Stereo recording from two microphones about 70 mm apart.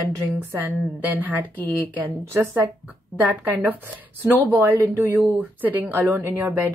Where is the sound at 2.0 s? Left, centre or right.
Right.